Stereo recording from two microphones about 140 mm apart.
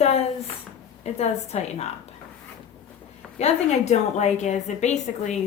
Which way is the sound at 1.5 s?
50° left (ahead or behind).